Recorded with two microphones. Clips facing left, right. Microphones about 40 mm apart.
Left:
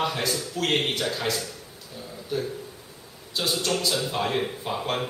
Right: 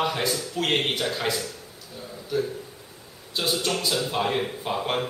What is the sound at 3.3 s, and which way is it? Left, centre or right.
Speech, centre.